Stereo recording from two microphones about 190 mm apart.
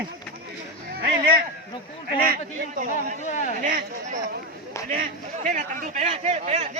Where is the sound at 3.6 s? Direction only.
45° right (ahead or behind).